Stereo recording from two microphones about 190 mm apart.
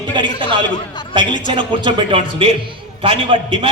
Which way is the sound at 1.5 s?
25° right (ahead or behind).